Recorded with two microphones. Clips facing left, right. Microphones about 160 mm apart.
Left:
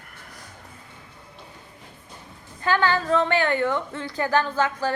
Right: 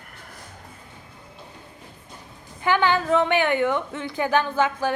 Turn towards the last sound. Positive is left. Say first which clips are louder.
# right 1 dB
turn(degrees=-15)  # may be behind; listen again after turning